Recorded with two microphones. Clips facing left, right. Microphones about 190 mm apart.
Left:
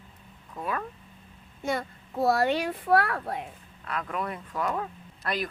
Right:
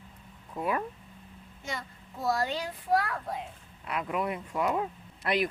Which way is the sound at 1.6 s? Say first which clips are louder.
Left 9 dB; 60° left (ahead or behind).